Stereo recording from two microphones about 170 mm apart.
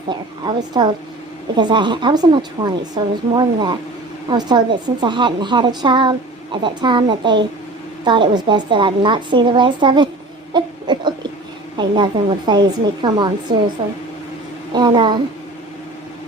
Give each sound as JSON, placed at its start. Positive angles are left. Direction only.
{"t": 0.1, "sound": "a woman's voice", "side_deg": -25}
{"t": 10.5, "sound": "a sound", "side_deg": -25}
{"t": 11.8, "sound": "a woman's voice", "side_deg": -25}
{"t": 13.8, "sound": "speech", "side_deg": -35}
{"t": 14.7, "sound": "a woman's voice", "side_deg": -25}